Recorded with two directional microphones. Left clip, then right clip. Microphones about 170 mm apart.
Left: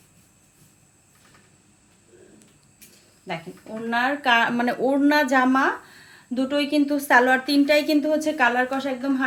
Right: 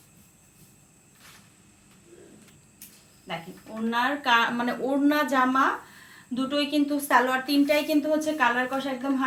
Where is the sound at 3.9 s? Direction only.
65° left (ahead or behind).